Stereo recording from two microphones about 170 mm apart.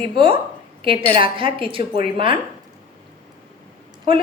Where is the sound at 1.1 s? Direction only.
30° right (ahead or behind).